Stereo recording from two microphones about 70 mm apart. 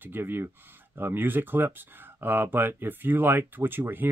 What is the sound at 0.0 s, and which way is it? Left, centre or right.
Speech, right.